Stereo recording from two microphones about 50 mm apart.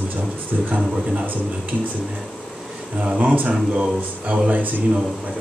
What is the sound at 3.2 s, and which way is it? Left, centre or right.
Speech, right.